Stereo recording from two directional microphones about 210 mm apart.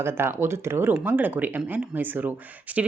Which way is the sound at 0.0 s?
10° right (ahead or behind).